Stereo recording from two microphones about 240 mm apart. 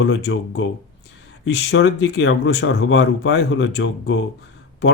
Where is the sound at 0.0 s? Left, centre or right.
Left.